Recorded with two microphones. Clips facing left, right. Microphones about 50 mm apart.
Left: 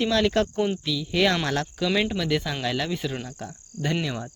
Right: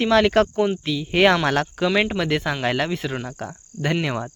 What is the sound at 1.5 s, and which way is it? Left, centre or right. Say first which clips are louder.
Speech: right 6 dB; right.